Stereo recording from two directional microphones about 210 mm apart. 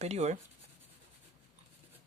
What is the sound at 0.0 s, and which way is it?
Speech, 30° right (ahead or behind).